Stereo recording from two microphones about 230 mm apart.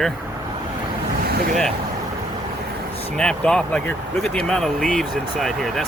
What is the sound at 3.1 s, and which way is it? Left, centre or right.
Speech, centre.